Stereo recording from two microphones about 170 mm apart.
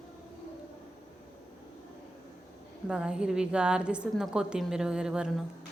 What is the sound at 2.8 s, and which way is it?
A woman's voice, 5° right (ahead or behind).